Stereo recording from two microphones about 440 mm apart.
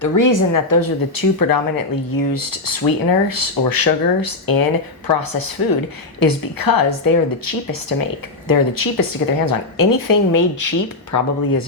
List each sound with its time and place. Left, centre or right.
0.0 s speech: left